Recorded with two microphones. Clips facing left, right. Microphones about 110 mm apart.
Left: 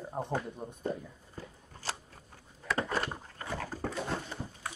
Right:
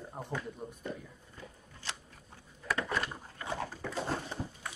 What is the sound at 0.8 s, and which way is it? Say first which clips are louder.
Shuffling cards: left 5 dB; 35° left (ahead or behind).